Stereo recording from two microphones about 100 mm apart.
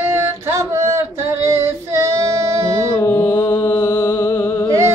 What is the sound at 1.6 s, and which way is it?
Child singing, 30° right (ahead or behind).